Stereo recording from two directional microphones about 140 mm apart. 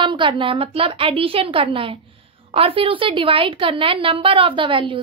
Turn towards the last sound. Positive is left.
turn(degrees=-35)  # may be behind; listen again after turning